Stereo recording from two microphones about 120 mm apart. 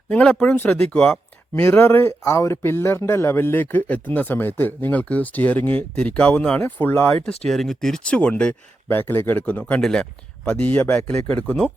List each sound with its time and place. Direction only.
0.1 s speech: 10° left (ahead or behind)
1.6 s speech: 20° left (ahead or behind)
7.4 s speech: centre (ahead or behind)